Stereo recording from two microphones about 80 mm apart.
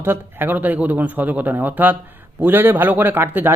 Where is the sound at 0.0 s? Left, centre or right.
Right.